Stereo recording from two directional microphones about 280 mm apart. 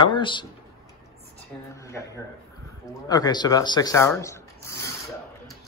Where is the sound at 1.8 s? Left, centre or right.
Centre.